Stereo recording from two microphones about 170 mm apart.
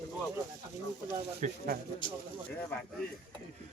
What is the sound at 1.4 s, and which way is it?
Speech, 50° right (ahead or behind).